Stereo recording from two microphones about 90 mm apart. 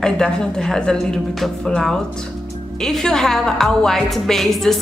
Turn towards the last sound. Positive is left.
turn(degrees=0)  # may be behind; listen again after turning